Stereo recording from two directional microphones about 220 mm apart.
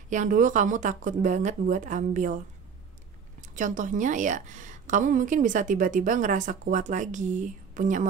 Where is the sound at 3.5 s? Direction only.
35° right (ahead or behind).